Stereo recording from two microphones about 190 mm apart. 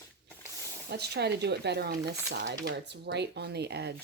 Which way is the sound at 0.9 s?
60° right (ahead or behind).